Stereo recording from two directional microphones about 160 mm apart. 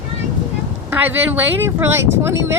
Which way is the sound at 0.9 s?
10° right (ahead or behind).